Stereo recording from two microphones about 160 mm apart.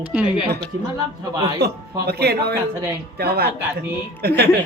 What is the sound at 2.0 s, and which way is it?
Speech, 90° right.